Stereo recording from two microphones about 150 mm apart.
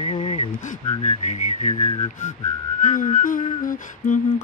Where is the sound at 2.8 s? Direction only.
55° left (ahead or behind).